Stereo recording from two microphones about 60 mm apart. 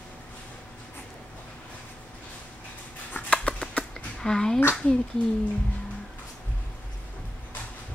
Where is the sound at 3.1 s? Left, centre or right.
Left.